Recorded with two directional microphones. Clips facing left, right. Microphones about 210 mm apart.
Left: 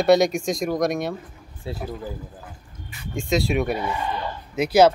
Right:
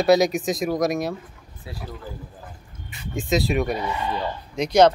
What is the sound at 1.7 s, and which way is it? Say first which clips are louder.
Speech: left 6 dB; 25° left (ahead or behind).